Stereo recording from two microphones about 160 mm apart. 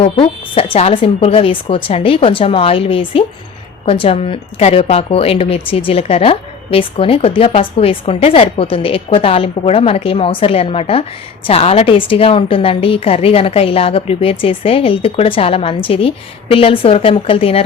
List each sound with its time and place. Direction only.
0.0 s a woman's voice: 35° left (ahead or behind)